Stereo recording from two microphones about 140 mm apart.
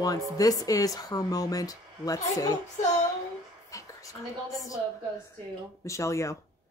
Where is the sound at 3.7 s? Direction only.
25° left (ahead or behind).